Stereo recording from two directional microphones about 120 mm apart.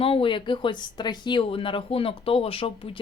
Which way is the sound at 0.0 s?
50° left (ahead or behind).